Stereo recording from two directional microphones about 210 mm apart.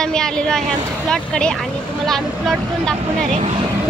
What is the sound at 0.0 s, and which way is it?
A woman's voice, 5° left (ahead or behind).